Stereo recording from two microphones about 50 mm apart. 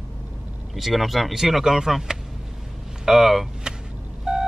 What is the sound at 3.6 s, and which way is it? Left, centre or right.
Vehicle, centre.